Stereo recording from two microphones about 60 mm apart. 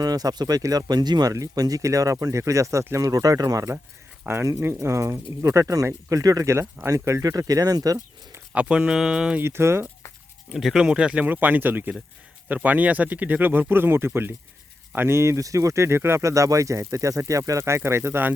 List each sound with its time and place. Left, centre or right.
0.0 s speech: right
4.2 s speech: right
4.8 s speech: right
8.5 s speech: centre
9.4 s speech: right
10.5 s speech: centre
10.8 s speech: centre
11.2 s speech: right
16.2 s speech: right